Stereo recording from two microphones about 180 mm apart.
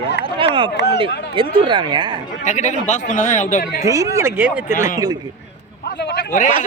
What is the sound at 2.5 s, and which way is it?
Speech, 40° left (ahead or behind).